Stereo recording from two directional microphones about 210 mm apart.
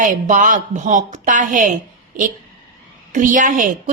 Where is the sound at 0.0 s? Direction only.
40° right (ahead or behind).